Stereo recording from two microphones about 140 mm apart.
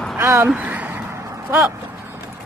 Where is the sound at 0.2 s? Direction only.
20° right (ahead or behind).